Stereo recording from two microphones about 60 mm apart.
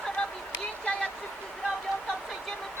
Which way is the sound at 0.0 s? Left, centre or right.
Centre.